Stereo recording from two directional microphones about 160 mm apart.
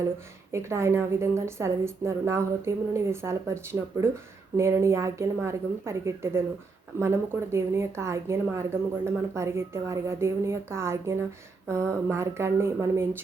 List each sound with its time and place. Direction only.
0.5 s a woman's voice: 15° right (ahead or behind)